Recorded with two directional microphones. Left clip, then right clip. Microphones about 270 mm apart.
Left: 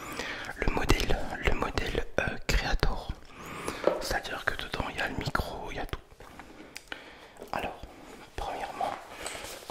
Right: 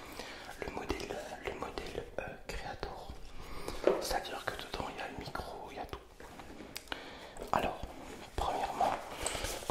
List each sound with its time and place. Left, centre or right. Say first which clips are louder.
0.1 s whispering: left 11 dB; left
3.6 s whispering: left 3 dB; left
8.4 s whispering: right 1 dB; centre